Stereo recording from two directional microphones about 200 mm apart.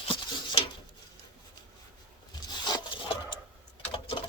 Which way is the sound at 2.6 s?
25° left (ahead or behind).